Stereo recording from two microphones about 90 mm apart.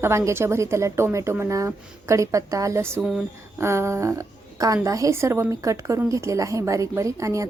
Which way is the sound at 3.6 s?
30° right (ahead or behind).